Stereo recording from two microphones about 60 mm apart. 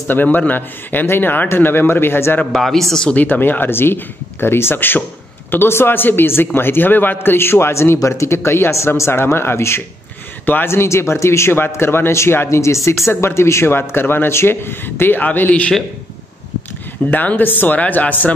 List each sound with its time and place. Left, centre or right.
0.1 s speech: left
2.5 s a man's voice: centre
3.1 s a man's voice: left
10.4 s a man's voice: left
10.7 s a man's voice: left
17.1 s speech: left